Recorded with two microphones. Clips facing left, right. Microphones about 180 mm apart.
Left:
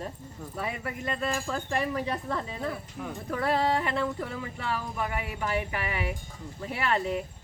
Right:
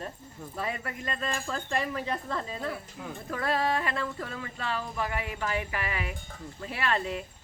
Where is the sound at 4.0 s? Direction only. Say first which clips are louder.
Left 4 dB; 15° left (ahead or behind).